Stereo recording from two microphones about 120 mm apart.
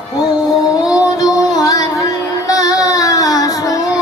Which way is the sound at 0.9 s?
30° left (ahead or behind).